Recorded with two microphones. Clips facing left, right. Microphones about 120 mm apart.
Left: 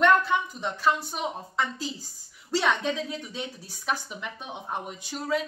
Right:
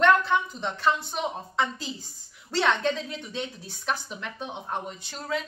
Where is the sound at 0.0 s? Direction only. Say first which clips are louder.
Even; 5° left (ahead or behind).